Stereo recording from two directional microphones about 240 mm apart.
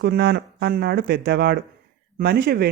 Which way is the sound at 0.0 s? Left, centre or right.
Right.